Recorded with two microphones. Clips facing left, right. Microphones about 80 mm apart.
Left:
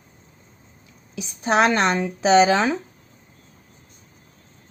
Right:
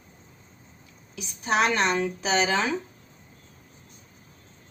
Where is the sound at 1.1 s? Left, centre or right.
Left.